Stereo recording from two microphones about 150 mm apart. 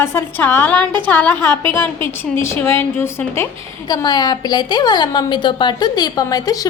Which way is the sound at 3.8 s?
25° left (ahead or behind).